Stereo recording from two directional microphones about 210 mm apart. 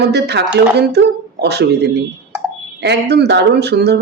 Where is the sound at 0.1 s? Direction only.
50° right (ahead or behind).